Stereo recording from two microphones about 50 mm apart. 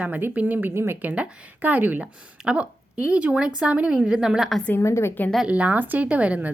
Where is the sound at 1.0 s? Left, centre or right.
Right.